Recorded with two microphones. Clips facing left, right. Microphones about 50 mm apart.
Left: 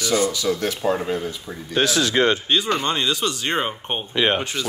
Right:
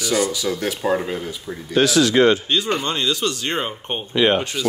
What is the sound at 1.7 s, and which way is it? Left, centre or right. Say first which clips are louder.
Speech: right 4 dB; left.